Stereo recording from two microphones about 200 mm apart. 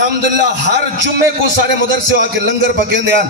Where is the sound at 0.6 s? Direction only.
60° right (ahead or behind).